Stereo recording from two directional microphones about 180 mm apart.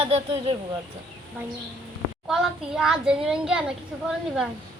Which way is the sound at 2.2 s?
5° right (ahead or behind).